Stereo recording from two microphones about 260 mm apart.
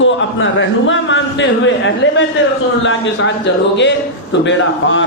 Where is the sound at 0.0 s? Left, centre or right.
Left.